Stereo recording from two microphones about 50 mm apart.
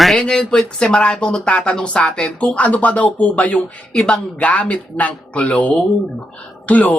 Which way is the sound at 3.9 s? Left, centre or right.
Centre.